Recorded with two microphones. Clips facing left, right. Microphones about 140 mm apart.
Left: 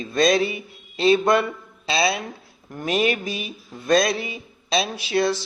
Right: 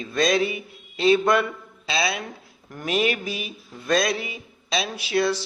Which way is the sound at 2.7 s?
35° left (ahead or behind).